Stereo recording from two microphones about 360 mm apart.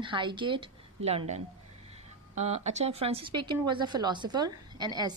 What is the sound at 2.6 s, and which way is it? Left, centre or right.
Speech, centre.